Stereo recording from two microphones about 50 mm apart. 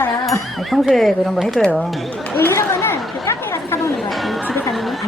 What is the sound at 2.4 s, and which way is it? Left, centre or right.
Chatter, left.